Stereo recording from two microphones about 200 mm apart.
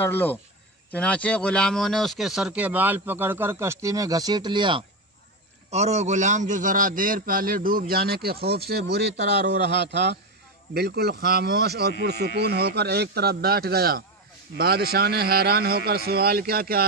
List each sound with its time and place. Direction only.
0.0 s a man's voice: 10° left (ahead or behind); by 4.8 s 25° right (ahead or behind)
5.7 s a man's voice: 35° right (ahead or behind); by 16.8 s 50° right (ahead or behind)